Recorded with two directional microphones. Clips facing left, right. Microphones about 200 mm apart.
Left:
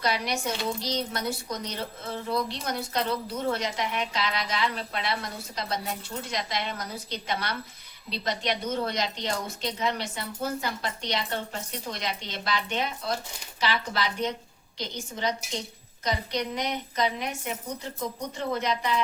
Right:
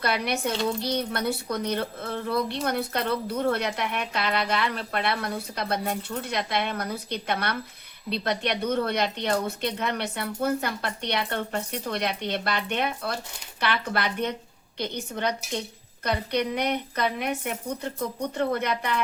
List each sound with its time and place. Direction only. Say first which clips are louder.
0.0 s speech: right 2 dB; 60° right (ahead or behind)